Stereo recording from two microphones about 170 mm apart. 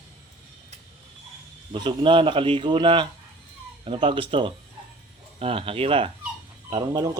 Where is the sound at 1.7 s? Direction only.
30° right (ahead or behind).